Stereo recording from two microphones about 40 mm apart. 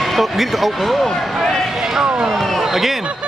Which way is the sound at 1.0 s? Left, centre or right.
Centre.